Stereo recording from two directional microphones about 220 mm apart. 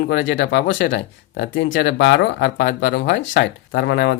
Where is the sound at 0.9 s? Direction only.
40° left (ahead or behind).